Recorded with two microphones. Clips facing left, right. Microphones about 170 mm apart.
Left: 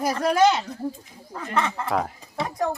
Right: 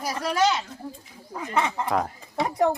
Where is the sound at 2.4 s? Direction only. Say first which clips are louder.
Right 4 dB; 20° right (ahead or behind).